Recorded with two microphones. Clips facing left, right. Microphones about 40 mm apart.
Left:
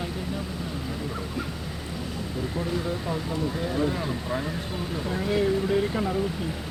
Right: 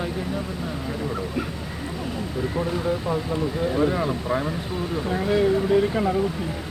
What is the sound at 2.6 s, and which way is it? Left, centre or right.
Speech, centre.